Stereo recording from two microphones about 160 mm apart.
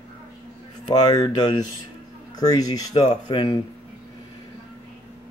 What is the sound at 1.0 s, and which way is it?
Speech, 25° left (ahead or behind).